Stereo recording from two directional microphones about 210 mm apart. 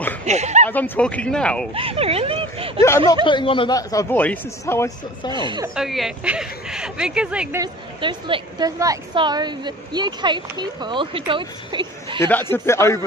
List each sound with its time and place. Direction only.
0.2 s speech: 35° right (ahead or behind)
0.7 s speech: 10° left (ahead or behind)
1.7 s speech: 25° right (ahead or behind)
3.3 s a man's voice: 25° left (ahead or behind)
5.3 s a woman's voice: 20° right (ahead or behind)
5.8 s speech: centre (ahead or behind)
7.6 s a woman's voice: 20° right (ahead or behind)
12.2 s a man's voice: 10° left (ahead or behind)